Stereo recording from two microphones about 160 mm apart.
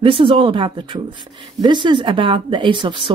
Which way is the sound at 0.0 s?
35° right (ahead or behind).